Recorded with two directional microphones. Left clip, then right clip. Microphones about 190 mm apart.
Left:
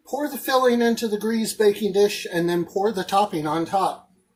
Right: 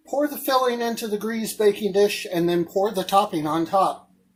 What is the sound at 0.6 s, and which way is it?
Speech, 15° right (ahead or behind).